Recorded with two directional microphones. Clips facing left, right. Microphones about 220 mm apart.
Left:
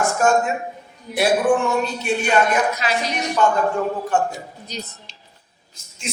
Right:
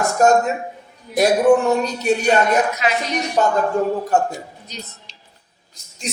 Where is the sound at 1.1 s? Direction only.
40° right (ahead or behind).